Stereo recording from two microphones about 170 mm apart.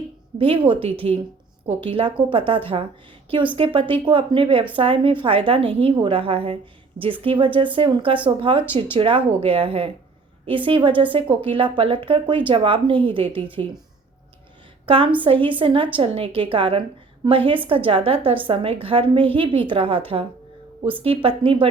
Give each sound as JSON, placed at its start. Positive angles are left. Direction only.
{"t": 0.3, "sound": "a woman's voice", "side_deg": -30}
{"t": 14.8, "sound": "a woman's voice", "side_deg": -30}